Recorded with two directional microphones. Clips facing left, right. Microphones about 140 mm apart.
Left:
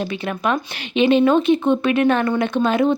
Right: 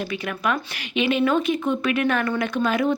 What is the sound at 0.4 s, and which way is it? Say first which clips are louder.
Speech: left 4 dB; 30° left (ahead or behind).